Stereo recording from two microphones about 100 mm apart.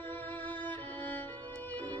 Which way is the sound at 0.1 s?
20° left (ahead or behind).